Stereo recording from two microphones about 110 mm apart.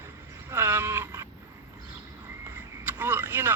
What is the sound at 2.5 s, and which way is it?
Vehicle, 15° right (ahead or behind).